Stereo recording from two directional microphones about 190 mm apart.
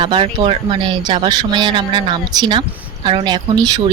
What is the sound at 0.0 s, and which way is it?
Speech, 25° right (ahead or behind).